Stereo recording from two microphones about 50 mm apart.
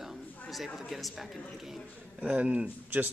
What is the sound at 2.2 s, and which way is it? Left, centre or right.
Speech, right.